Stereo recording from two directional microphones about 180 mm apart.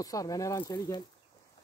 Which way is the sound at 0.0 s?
20° left (ahead or behind).